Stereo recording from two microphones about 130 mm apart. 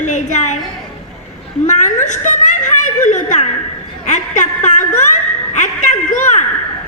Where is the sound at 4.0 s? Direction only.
70° left (ahead or behind).